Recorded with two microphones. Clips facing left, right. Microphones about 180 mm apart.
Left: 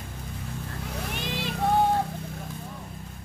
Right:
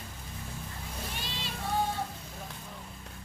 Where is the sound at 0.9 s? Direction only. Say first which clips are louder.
Left 8 dB; 70° left (ahead or behind).